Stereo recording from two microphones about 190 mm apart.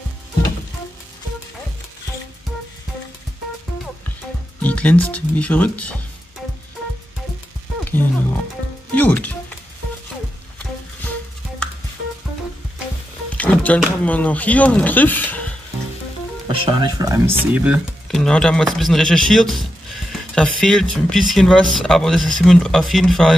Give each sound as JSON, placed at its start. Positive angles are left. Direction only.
{"t": 4.6, "sound": "speech", "side_deg": 5}
{"t": 7.8, "sound": "music", "side_deg": 10}
{"t": 13.4, "sound": "speech", "side_deg": 5}
{"t": 16.4, "sound": "speech", "side_deg": -25}
{"t": 18.1, "sound": "speech", "side_deg": 5}